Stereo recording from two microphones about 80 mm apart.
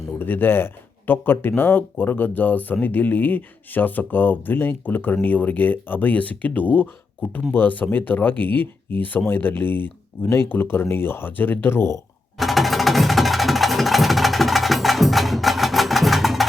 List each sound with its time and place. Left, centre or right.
0.2 s speech: left
12.4 s music: centre